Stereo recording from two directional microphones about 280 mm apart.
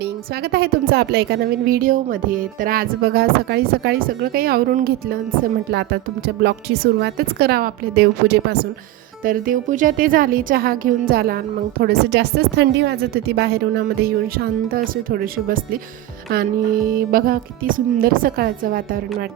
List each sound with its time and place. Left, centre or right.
0.0 s speech: right
16.9 s speech: right